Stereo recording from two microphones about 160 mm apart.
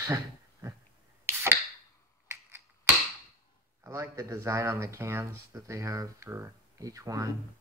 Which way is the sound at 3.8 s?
20° right (ahead or behind).